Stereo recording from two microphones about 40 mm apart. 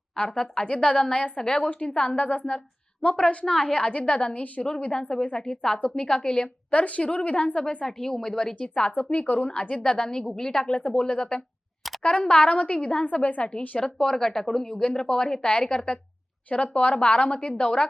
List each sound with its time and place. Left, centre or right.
0.2 s a woman's voice: left
1.7 s a woman's voice: left
3.4 s a woman's voice: centre
5.4 s a woman's voice: centre; by 7.6 s left
7.9 s speech: centre
8.5 s a woman's voice: left
8.9 s a woman's voice: left
9.5 s a woman's voice: left; by 10.6 s centre
10.6 s a woman's voice: left
13.7 s a woman's voice: centre
16.7 s a woman's voice: left